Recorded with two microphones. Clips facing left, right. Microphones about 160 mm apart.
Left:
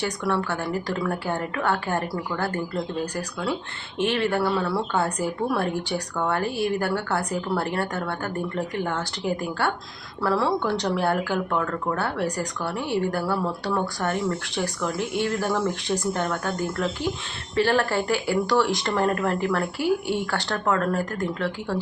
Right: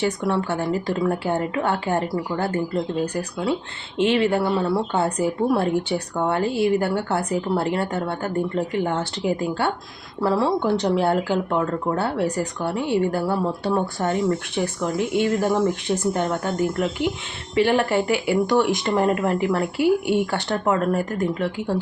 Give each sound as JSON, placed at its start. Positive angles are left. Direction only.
{"t": 0.0, "sound": "speech", "side_deg": -20}